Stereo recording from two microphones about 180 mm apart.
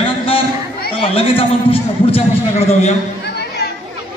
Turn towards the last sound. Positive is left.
turn(degrees=65)  # may be behind; listen again after turning